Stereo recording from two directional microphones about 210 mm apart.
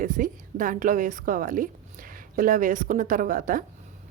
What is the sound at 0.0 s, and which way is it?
A woman's voice, 40° right (ahead or behind).